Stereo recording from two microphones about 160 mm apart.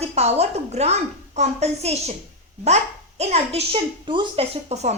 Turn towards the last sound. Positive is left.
turn(degrees=-45)  # may be behind; listen again after turning